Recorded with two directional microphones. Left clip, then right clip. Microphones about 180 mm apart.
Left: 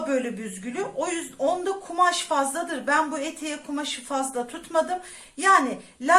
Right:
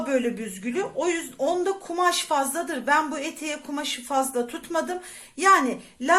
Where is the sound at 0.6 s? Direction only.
35° right (ahead or behind).